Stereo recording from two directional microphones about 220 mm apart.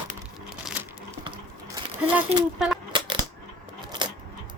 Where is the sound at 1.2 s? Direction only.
25° right (ahead or behind).